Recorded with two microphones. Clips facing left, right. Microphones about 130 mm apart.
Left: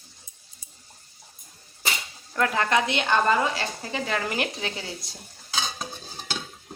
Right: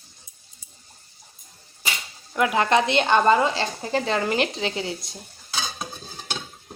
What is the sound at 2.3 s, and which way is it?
Speech, 15° right (ahead or behind).